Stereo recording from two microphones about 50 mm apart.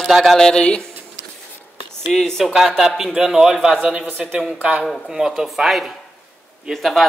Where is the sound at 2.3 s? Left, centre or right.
Centre.